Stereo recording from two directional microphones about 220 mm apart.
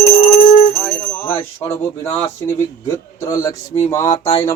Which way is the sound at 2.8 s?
15° left (ahead or behind).